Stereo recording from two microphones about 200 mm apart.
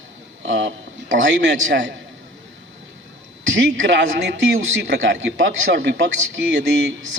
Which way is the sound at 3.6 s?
60° right (ahead or behind).